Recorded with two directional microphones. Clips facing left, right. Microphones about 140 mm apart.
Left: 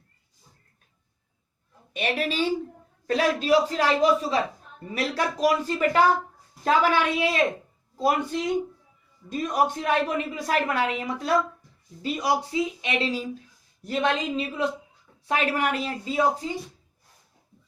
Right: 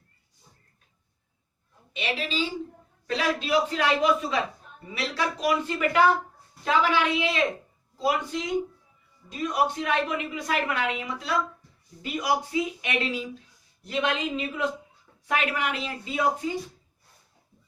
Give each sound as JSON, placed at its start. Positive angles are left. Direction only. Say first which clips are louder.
{"t": 1.9, "sound": "a woman's voice", "louder": "left 4 dB", "side_deg": 50}
{"t": 3.1, "sound": "a woman's voice", "louder": "left 4 dB", "side_deg": 45}
{"t": 4.9, "sound": "a woman's voice", "louder": "left 2 dB", "side_deg": 45}
{"t": 12.0, "sound": "a woman's voice", "louder": "left 2 dB", "side_deg": 30}